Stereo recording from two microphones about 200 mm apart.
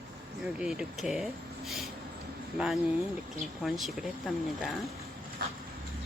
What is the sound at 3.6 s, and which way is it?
Speech, centre (ahead or behind).